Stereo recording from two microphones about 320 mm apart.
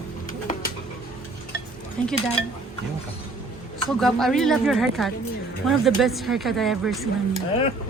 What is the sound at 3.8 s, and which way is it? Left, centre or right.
Speech, centre.